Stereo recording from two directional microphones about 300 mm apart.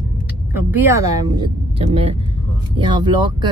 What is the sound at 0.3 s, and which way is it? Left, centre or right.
Speech, centre.